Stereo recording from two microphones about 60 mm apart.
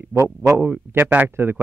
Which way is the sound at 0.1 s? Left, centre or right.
Right.